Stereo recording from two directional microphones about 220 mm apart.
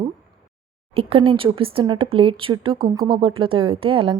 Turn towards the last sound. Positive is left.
turn(degrees=-25)  # may be behind; listen again after turning